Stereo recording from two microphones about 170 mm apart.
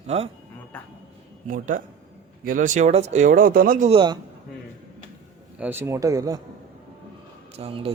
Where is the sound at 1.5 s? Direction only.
50° right (ahead or behind).